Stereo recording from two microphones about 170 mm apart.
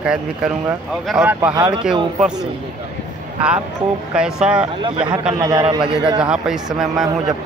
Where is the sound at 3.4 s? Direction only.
5° right (ahead or behind).